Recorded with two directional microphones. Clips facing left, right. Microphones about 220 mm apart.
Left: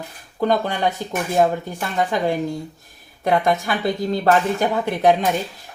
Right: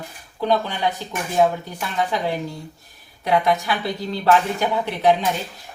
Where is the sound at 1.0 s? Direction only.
50° left (ahead or behind).